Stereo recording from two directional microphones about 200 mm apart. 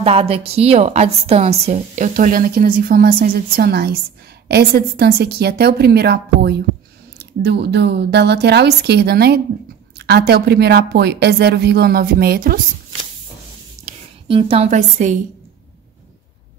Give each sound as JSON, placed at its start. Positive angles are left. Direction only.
{"t": 0.0, "sound": "a woman's voice", "side_deg": -30}
{"t": 13.8, "sound": "a woman's voice", "side_deg": -25}